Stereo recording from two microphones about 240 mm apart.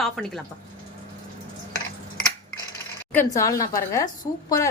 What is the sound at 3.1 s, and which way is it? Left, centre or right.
Speech, centre.